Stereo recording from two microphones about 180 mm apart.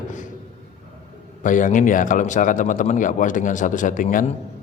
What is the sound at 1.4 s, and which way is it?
A man's voice, 45° left (ahead or behind).